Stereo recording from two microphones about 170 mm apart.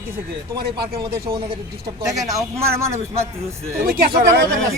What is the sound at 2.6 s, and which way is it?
Speech, 15° right (ahead or behind).